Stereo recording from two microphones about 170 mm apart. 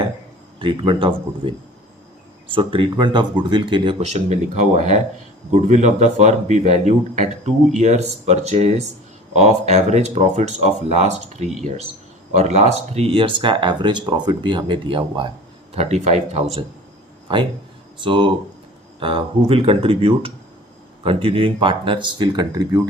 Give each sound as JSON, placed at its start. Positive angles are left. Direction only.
{"t": 0.6, "sound": "speech", "side_deg": -30}
{"t": 4.0, "sound": "speech", "side_deg": -40}
{"t": 15.7, "sound": "speech", "side_deg": -40}
{"t": 17.3, "sound": "speech", "side_deg": -30}